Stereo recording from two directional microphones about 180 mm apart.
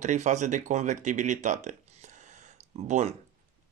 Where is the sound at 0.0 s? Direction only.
40° right (ahead or behind).